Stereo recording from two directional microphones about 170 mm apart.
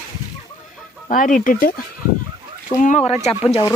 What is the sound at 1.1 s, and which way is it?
Speech, 50° left (ahead or behind).